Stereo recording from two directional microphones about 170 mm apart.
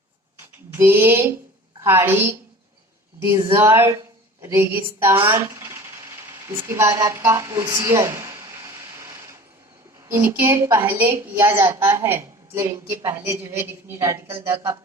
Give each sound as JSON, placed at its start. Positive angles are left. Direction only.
{"t": 0.3, "sound": "a sound", "side_deg": -15}
{"t": 1.8, "sound": "a woman's voice", "side_deg": -15}
{"t": 6.5, "sound": "a woman's voice", "side_deg": -15}